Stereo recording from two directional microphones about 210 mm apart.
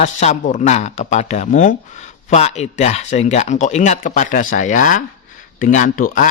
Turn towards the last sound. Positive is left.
turn(degrees=40)  # may be behind; listen again after turning